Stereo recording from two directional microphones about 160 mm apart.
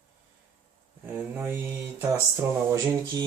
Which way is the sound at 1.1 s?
10° right (ahead or behind).